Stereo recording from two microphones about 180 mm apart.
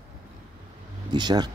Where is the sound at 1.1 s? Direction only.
25° right (ahead or behind).